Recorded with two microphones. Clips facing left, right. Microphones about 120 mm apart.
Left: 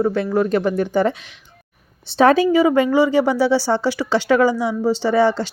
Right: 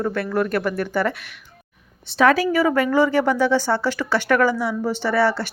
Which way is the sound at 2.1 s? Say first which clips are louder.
Left 4 dB; 30° left (ahead or behind).